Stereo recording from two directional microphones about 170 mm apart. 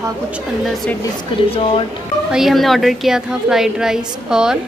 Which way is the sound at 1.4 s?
35° left (ahead or behind).